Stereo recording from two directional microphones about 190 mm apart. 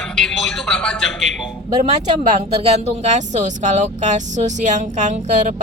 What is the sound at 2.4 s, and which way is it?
Speech, 35° right (ahead or behind).